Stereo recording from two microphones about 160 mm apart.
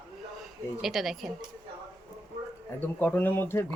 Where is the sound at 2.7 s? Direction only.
10° left (ahead or behind).